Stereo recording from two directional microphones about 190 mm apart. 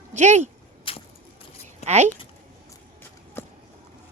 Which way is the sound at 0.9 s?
30° left (ahead or behind).